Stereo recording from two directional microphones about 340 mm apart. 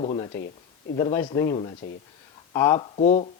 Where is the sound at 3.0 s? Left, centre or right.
Centre.